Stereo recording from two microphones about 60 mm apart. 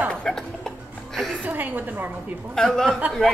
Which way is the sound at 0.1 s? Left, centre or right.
Centre.